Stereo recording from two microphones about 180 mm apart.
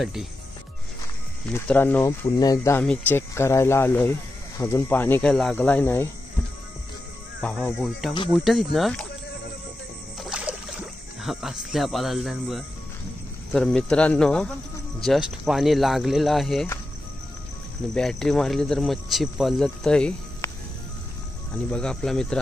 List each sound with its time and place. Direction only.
0.0 s speech: centre (ahead or behind)
1.5 s speech: 10° left (ahead or behind)
2.8 s speech: 10° left (ahead or behind)
7.4 s speech: 5° left (ahead or behind)
10.1 s rowboat: centre (ahead or behind)
13.5 s speech: centre (ahead or behind)
17.9 s speech: 5° left (ahead or behind)
21.6 s speech: 5° left (ahead or behind)